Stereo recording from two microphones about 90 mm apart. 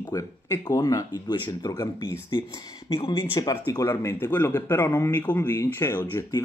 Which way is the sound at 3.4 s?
40° left (ahead or behind).